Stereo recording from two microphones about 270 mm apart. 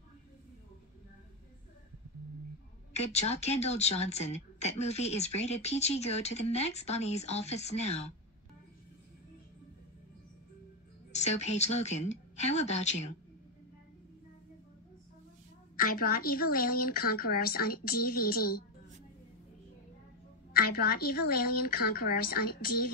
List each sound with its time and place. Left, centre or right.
2.9 s speech: left
11.1 s speech: left
15.7 s a woman's voice: left
20.5 s a woman's voice: left